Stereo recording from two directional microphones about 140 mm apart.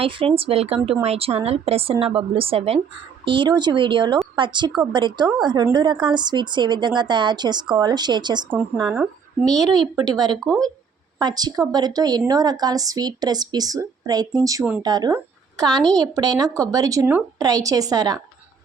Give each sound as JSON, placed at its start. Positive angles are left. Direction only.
{"t": 0.0, "sound": "a woman's voice", "side_deg": -40}
{"t": 9.6, "sound": "a woman's voice", "side_deg": -30}
{"t": 15.1, "sound": "a sound", "side_deg": -25}
{"t": 16.0, "sound": "a woman's voice", "side_deg": -30}